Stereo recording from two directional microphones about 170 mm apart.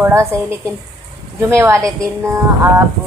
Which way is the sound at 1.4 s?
15° right (ahead or behind).